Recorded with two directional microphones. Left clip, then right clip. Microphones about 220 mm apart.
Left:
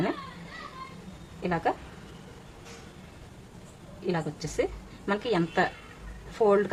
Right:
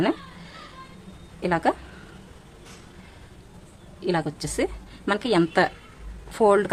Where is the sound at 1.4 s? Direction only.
50° right (ahead or behind).